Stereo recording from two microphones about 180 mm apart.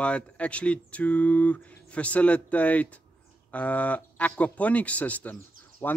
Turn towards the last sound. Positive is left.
turn(degrees=10)  # may be behind; listen again after turning